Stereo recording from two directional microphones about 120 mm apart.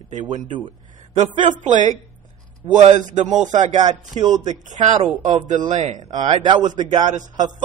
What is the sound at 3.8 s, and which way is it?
Speech, 35° right (ahead or behind).